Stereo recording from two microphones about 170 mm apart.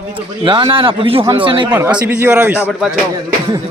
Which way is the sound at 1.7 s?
10° right (ahead or behind).